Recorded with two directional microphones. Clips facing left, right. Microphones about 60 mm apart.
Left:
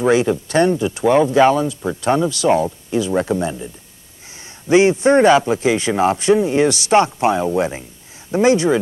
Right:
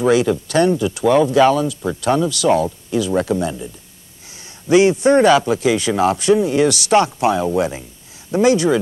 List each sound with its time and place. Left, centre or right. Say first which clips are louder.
0.0 s speech: even; left